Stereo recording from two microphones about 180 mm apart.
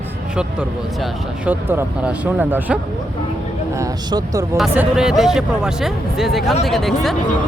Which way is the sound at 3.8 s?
20° right (ahead or behind).